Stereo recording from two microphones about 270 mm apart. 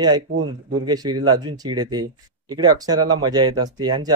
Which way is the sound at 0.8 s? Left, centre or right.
Centre.